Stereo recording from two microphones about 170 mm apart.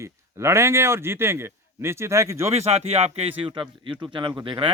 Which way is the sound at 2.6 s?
35° right (ahead or behind).